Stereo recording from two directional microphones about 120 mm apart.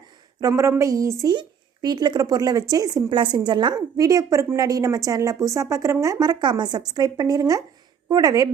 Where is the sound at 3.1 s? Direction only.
40° right (ahead or behind).